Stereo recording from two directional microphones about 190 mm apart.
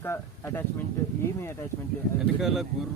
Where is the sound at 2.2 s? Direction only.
Centre (ahead or behind).